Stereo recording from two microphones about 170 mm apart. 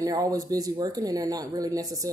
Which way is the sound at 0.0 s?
20° right (ahead or behind).